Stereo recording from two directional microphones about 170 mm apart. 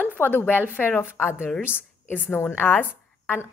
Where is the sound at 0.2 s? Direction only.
10° left (ahead or behind).